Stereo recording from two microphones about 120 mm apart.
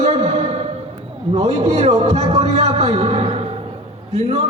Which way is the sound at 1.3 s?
60° right (ahead or behind).